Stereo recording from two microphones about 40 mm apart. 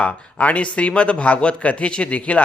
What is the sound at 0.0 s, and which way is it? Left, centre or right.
Speech, left.